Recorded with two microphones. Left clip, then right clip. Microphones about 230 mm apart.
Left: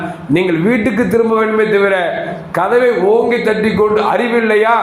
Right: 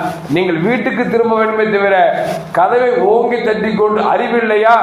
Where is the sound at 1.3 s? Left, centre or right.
Left.